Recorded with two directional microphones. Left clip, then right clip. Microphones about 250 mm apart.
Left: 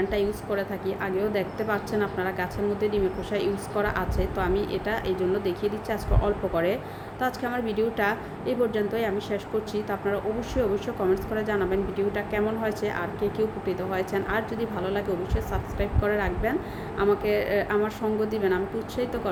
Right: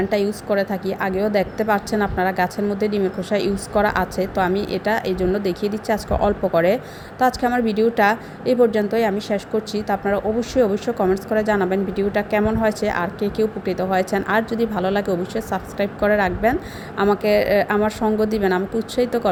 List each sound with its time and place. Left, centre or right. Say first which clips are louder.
0.1 s a woman's voice: right 7 dB; right